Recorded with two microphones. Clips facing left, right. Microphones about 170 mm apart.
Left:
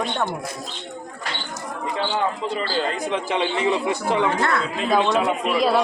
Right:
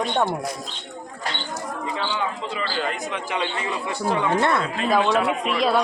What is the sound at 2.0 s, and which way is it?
A man's voice, 40° left (ahead or behind).